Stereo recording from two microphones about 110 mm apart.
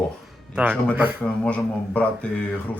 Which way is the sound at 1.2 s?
10° left (ahead or behind).